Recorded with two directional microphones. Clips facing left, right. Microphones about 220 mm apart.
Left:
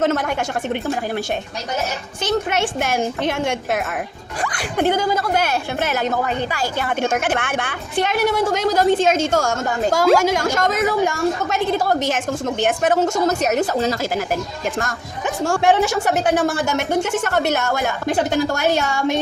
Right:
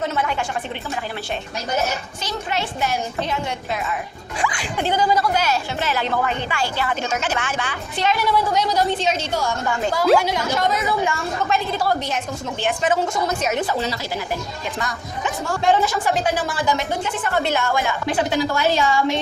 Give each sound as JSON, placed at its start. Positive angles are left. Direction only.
{"t": 0.2, "sound": "a woman's voice", "side_deg": 50}
{"t": 2.2, "sound": "speech", "side_deg": 70}
{"t": 3.2, "sound": "a woman's voice", "side_deg": 85}
{"t": 4.4, "sound": "a woman's voice", "side_deg": 55}
{"t": 8.5, "sound": "a woman's voice", "side_deg": 50}
{"t": 11.9, "sound": "a woman's voice", "side_deg": 90}
{"t": 12.5, "sound": "a woman's voice", "side_deg": 50}
{"t": 13.1, "sound": "a woman's voice", "side_deg": 40}
{"t": 15.6, "sound": "speech", "side_deg": 70}
{"t": 17.5, "sound": "a woman's voice", "side_deg": 45}